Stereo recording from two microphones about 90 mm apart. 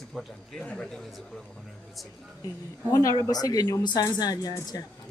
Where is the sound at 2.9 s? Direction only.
40° left (ahead or behind).